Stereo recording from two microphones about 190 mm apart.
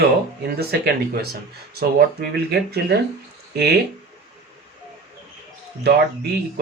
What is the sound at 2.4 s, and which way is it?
Speech, 60° right (ahead or behind).